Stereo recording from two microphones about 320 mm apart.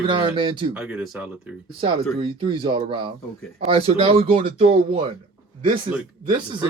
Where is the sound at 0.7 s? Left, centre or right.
Centre.